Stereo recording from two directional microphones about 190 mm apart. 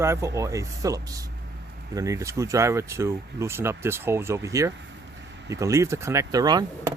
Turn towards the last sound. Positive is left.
turn(degrees=-20)  # may be behind; listen again after turning